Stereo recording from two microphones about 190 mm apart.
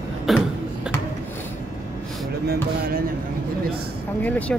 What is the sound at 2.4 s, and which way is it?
Speech, 55° right (ahead or behind).